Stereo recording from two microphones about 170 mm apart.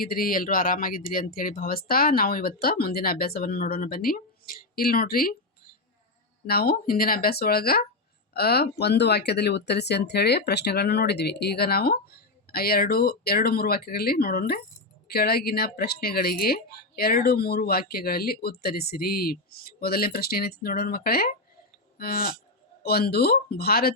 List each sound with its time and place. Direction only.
0.0 s speech: 60° left (ahead or behind)
6.5 s speech: 65° left (ahead or behind)
21.9 s cattle: 60° left (ahead or behind)
22.8 s speech: 65° left (ahead or behind)